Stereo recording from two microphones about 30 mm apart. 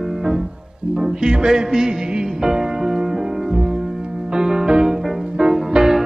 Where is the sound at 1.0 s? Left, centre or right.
Right.